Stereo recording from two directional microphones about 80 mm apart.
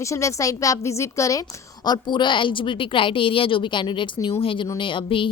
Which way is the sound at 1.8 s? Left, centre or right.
Left.